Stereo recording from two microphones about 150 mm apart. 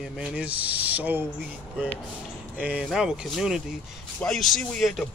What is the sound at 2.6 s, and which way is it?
Speech, 5° right (ahead or behind).